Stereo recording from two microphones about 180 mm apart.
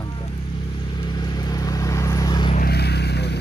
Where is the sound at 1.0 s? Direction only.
25° left (ahead or behind).